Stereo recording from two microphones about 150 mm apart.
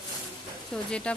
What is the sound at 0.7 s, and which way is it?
Speech, 5° left (ahead or behind).